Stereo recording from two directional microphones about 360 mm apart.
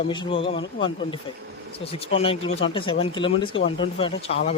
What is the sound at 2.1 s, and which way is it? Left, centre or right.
Speech, centre.